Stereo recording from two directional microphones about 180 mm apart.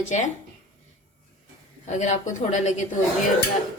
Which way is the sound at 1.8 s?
40° left (ahead or behind).